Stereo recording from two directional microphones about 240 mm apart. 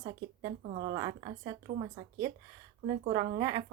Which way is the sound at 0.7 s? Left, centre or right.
Right.